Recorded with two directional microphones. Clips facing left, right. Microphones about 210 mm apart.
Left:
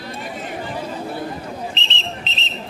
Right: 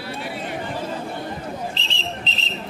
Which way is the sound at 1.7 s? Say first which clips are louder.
Even; 20° left (ahead or behind).